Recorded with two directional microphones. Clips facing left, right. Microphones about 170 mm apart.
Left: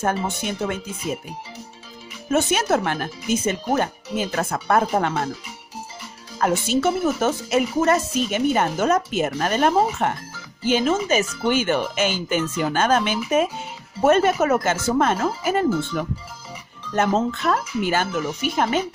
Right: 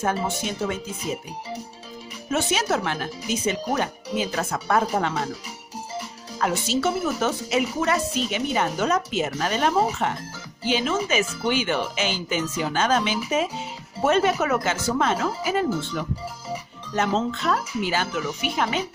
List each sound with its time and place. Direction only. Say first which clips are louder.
0.0 s speech: left 1 dB; 55° left (ahead or behind)
2.3 s speech: left 4 dB; 50° left (ahead or behind)
6.4 s speech: left 3 dB; 50° left (ahead or behind)
16.9 s speech: left 3 dB; 50° left (ahead or behind)